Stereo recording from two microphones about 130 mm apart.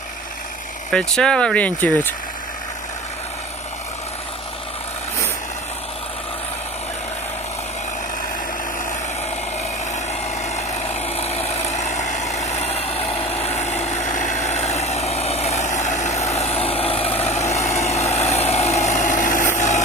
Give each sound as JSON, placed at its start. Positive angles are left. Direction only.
{"t": 0.9, "sound": "speech", "side_deg": 5}
{"t": 9.9, "sound": "vehicle", "side_deg": 60}
{"t": 19.5, "sound": "vehicle", "side_deg": 65}